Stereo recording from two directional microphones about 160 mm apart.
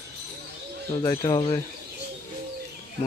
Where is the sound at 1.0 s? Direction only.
25° left (ahead or behind).